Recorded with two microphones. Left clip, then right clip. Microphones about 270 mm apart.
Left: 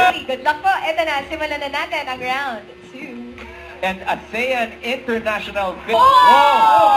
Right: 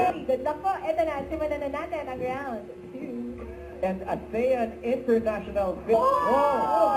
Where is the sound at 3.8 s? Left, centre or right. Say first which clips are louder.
Left 8 dB; centre.